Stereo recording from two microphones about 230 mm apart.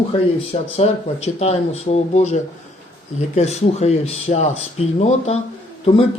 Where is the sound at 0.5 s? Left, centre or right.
Left.